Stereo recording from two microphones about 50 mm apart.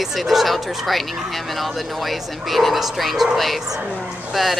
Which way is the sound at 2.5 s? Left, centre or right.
Centre.